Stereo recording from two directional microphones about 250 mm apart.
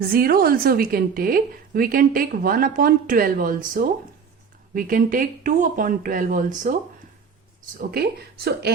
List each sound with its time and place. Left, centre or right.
0.0 s a woman's voice: right
7.8 s a woman's voice: right